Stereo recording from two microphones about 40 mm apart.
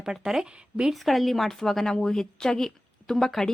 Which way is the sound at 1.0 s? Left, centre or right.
Centre.